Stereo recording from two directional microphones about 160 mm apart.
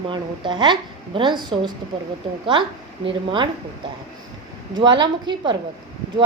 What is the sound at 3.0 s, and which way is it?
Speech, 30° right (ahead or behind).